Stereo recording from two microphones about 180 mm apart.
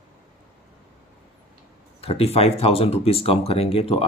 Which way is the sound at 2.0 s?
35° left (ahead or behind).